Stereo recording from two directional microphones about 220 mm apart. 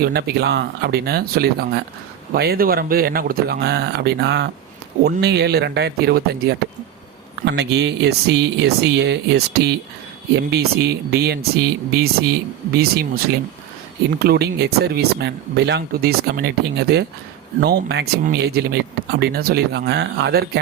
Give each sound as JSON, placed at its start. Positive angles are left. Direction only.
{"t": 0.0, "sound": "speech", "side_deg": -45}
{"t": 14.2, "sound": "speech", "side_deg": -45}